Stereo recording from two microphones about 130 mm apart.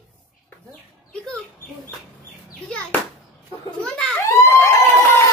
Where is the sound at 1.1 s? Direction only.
5° left (ahead or behind).